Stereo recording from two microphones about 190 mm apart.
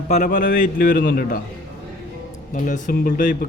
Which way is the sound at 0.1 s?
45° left (ahead or behind).